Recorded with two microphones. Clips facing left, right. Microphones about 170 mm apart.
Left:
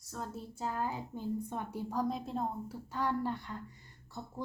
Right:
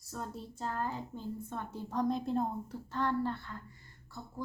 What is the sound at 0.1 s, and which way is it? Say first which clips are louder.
A woman's voice: even; 5° left (ahead or behind).